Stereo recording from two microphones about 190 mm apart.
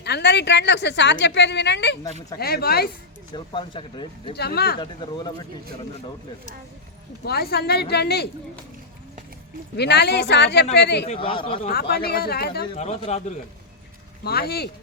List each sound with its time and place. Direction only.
0.0 s a woman's voice: 60° left (ahead or behind)
2.4 s a woman's voice: 55° left (ahead or behind)
3.3 s speech: 25° left (ahead or behind)
4.4 s a woman's voice: 55° left (ahead or behind)
4.8 s speech: 25° left (ahead or behind)
7.3 s a woman's voice: 55° left (ahead or behind)
9.7 s a woman's voice: 60° left (ahead or behind)
11.0 s speech: 30° left (ahead or behind)
11.7 s a woman's voice: 55° left (ahead or behind)
12.7 s a man's voice: 35° left (ahead or behind)
14.3 s a woman's voice: 55° left (ahead or behind)